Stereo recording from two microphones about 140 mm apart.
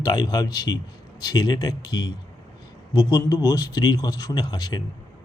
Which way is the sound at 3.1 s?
25° left (ahead or behind).